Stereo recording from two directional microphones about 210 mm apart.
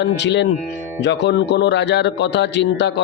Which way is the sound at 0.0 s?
55° left (ahead or behind).